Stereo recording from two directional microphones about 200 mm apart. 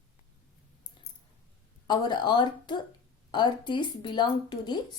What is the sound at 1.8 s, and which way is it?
A woman's voice, 20° left (ahead or behind).